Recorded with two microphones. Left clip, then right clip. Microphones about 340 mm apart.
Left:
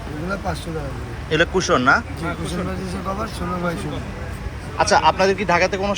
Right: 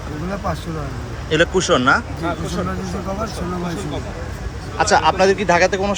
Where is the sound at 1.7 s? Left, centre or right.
Centre.